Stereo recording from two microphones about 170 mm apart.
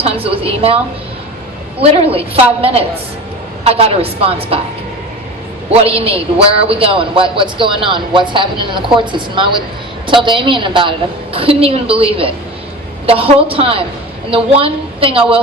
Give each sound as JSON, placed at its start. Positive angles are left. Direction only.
{"t": 0.0, "sound": "a man's voice", "side_deg": -35}
{"t": 1.8, "sound": "a man's voice", "side_deg": -35}
{"t": 5.8, "sound": "a man's voice", "side_deg": -35}